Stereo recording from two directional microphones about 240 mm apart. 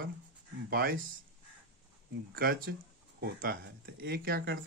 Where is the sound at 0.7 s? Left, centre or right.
Right.